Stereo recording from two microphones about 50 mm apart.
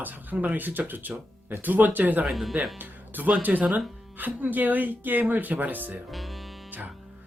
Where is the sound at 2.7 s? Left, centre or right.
Right.